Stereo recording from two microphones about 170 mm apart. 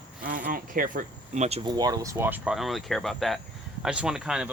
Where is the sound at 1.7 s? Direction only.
25° right (ahead or behind); by 4.5 s 5° right (ahead or behind).